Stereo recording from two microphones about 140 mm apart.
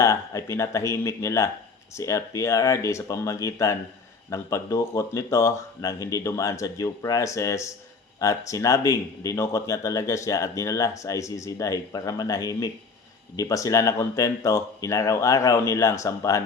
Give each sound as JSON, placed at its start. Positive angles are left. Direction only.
{"t": 0.0, "sound": "speech", "side_deg": 20}